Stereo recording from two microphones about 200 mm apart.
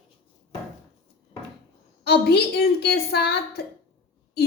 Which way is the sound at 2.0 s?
55° left (ahead or behind).